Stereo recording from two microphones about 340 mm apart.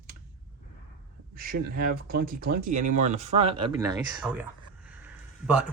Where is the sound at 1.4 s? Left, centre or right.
Right; by 4.4 s centre.